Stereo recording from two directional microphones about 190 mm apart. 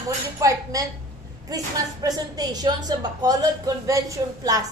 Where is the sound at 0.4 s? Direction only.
15° right (ahead or behind).